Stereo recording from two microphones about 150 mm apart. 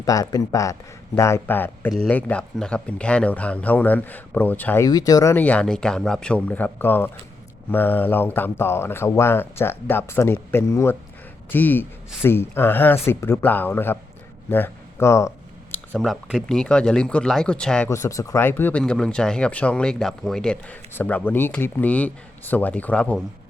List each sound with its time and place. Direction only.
0.0 s speech: 25° left (ahead or behind)
4.9 s speech: 25° left (ahead or behind)
15.9 s speech: centre (ahead or behind)
17.8 s speech: 20° left (ahead or behind)